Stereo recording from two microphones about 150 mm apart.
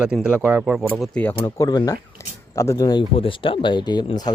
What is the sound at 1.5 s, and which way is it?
Speech, 25° left (ahead or behind).